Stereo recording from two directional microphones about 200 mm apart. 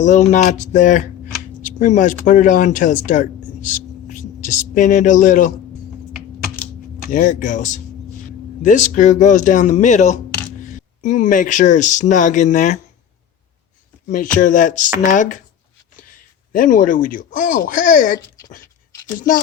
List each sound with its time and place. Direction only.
0.0 s speech: 35° left (ahead or behind)
7.1 s speech: 40° left (ahead or behind)
8.6 s speech: 40° left (ahead or behind)
14.1 s speech: 40° left (ahead or behind)